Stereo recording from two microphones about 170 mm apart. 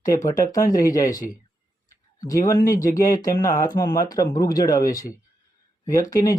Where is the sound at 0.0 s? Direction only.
20° left (ahead or behind).